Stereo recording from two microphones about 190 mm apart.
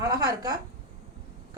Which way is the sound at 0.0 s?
20° right (ahead or behind).